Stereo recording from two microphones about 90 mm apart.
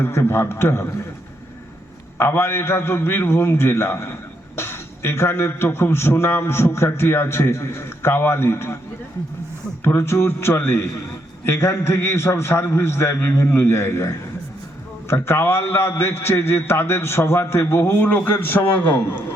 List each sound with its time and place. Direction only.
0.0 s a man's voice: 25° left (ahead or behind)
2.1 s a man's voice: 30° left (ahead or behind)
9.8 s a man's voice: 25° left (ahead or behind)